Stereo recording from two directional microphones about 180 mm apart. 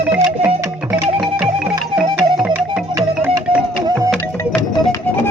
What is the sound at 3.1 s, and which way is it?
Music, 10° right (ahead or behind).